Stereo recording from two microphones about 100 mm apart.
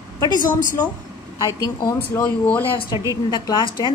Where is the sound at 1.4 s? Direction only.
35° left (ahead or behind).